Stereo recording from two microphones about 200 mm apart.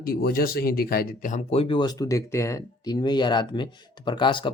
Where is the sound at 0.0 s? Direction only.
50° left (ahead or behind).